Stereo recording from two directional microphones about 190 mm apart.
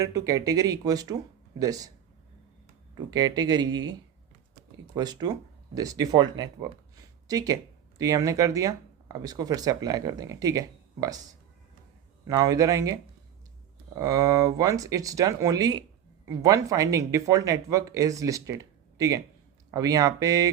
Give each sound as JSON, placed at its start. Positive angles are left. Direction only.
{"t": 0.0, "sound": "speech", "side_deg": -15}
{"t": 2.9, "sound": "speech", "side_deg": -20}
{"t": 4.9, "sound": "speech", "side_deg": -20}
{"t": 12.3, "sound": "speech", "side_deg": -20}
{"t": 14.0, "sound": "speech", "side_deg": -20}